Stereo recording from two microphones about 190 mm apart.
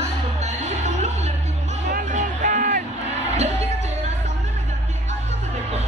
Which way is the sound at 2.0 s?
40° right (ahead or behind).